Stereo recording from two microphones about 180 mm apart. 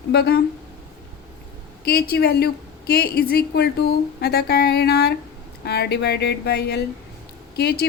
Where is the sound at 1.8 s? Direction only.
60° left (ahead or behind).